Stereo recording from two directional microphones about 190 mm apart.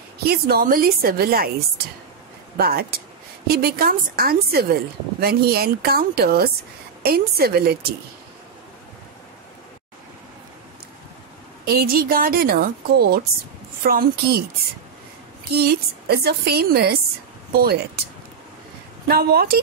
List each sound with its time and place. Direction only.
0.2 s a woman's voice: 55° right (ahead or behind)
2.5 s a woman's voice: 55° right (ahead or behind)
11.6 s a woman's voice: 50° right (ahead or behind)
15.5 s a woman's voice: 55° right (ahead or behind)
19.0 s a woman's voice: 55° right (ahead or behind)